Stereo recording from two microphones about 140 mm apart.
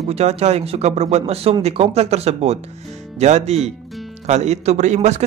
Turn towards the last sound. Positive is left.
turn(degrees=-55)  # may be behind; listen again after turning